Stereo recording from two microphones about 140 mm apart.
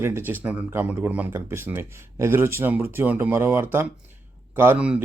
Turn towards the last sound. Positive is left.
turn(degrees=-10)  # may be behind; listen again after turning